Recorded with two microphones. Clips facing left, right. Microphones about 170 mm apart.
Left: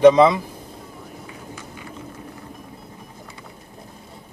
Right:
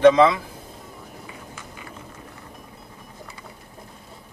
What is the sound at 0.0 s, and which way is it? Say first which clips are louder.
Speech: left 2 dB; 15° left (ahead or behind).